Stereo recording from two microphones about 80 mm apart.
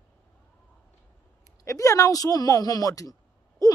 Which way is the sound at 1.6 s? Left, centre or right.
Left.